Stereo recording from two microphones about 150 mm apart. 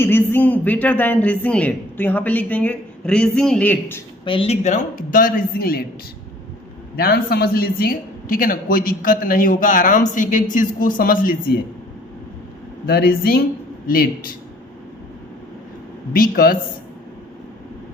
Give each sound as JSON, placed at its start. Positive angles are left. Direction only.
{"t": 0.0, "sound": "speech", "side_deg": 15}
{"t": 4.3, "sound": "speech", "side_deg": 35}
{"t": 4.6, "sound": "a man's voice", "side_deg": 55}
{"t": 6.9, "sound": "a man's voice", "side_deg": 90}
{"t": 12.8, "sound": "speech", "side_deg": 90}
{"t": 13.8, "sound": "a man's voice", "side_deg": 75}
{"t": 16.1, "sound": "a man's voice", "side_deg": 85}